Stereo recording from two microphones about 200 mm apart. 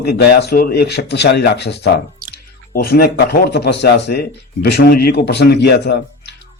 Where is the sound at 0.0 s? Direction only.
55° left (ahead or behind).